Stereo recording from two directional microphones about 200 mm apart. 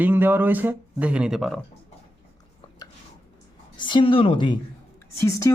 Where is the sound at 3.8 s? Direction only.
25° left (ahead or behind).